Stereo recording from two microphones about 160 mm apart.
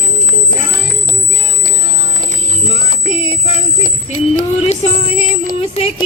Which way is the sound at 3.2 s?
40° left (ahead or behind).